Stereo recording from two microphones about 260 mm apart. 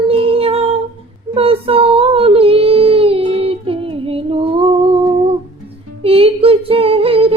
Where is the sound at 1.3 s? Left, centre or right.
Right.